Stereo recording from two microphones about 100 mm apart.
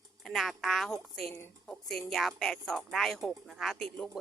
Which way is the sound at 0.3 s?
Centre (ahead or behind).